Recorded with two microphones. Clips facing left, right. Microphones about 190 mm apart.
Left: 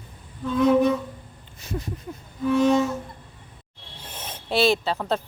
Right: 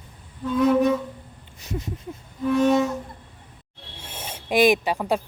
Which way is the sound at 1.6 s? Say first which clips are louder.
Even; 20° right (ahead or behind).